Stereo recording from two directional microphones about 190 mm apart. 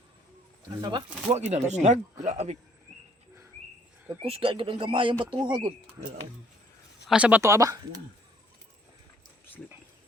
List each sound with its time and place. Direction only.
0.8 s speech: 25° right (ahead or behind)
4.2 s speech: 30° right (ahead or behind)
7.1 s speech: 5° right (ahead or behind)